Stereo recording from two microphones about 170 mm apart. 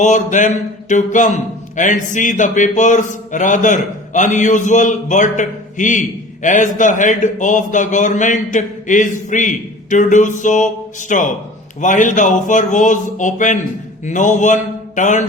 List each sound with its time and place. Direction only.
0.0 s a man's voice: 45° left (ahead or behind)